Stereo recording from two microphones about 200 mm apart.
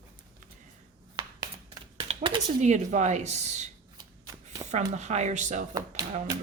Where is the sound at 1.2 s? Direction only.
20° right (ahead or behind).